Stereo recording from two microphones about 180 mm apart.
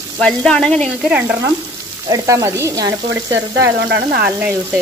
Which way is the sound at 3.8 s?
70° right (ahead or behind).